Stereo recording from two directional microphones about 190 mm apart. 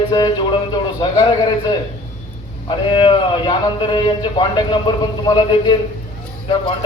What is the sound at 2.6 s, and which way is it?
A man's voice, 25° left (ahead or behind).